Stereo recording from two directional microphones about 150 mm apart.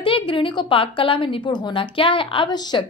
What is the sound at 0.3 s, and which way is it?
A woman's voice, 35° left (ahead or behind).